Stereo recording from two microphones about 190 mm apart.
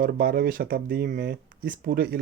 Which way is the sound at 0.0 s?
50° right (ahead or behind).